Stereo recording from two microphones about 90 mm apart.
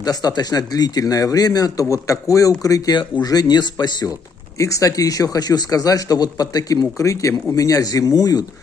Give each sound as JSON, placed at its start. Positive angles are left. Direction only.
{"t": 0.0, "sound": "speech", "side_deg": 45}
{"t": 4.6, "sound": "a man's voice", "side_deg": 35}